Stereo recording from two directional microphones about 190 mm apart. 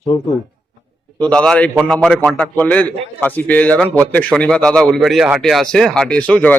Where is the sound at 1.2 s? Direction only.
5° left (ahead or behind).